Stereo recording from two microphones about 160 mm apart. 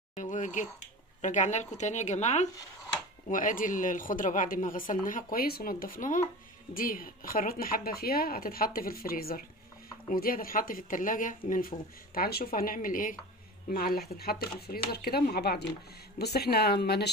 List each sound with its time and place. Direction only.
0.1 s a sound: 50° left (ahead or behind)
1.2 s a woman's voice: 50° left (ahead or behind)
13.7 s speech: 70° left (ahead or behind); by 17.1 s 90° left